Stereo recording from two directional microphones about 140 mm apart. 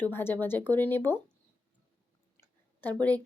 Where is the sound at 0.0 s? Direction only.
15° left (ahead or behind).